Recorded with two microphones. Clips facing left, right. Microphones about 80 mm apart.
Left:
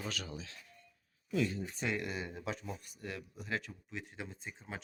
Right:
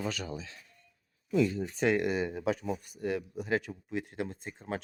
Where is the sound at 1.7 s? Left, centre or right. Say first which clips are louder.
Right 10 dB; right.